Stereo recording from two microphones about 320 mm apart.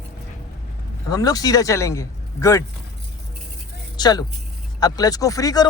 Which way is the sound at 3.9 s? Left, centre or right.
Centre.